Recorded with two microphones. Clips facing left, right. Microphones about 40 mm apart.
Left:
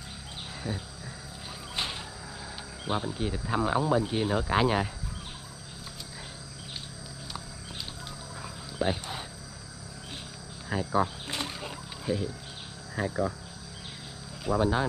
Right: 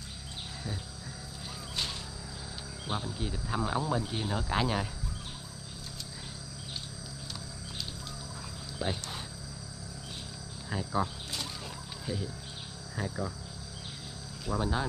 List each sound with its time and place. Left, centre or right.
0.7 s speech: centre
2.9 s speech: left
8.4 s dog: left
10.7 s speech: centre
11.2 s wild animals: left
12.1 s speech: centre
14.4 s speech: centre